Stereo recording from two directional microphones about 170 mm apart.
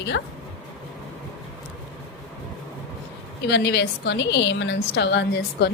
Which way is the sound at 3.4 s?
80° left.